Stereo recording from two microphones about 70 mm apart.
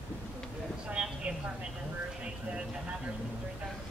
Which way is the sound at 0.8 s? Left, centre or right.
Centre.